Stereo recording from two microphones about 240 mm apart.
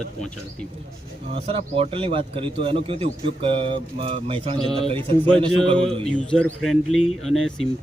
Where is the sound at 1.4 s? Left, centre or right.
Right.